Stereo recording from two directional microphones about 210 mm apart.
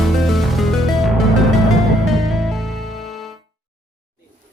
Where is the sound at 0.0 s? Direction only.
Centre (ahead or behind).